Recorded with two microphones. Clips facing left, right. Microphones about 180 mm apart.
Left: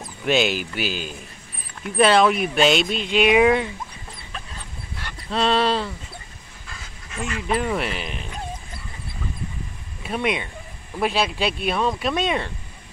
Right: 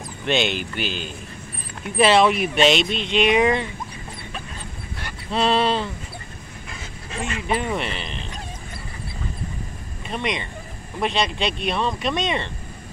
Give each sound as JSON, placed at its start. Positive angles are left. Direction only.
{"t": 0.2, "sound": "speech", "side_deg": 5}
{"t": 5.3, "sound": "speech", "side_deg": 0}
{"t": 7.1, "sound": "duck", "side_deg": -30}
{"t": 7.4, "sound": "speech", "side_deg": 0}
{"t": 10.0, "sound": "speech", "side_deg": 5}